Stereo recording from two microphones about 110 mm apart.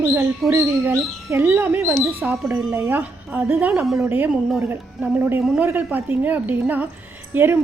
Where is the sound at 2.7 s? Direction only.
25° right (ahead or behind).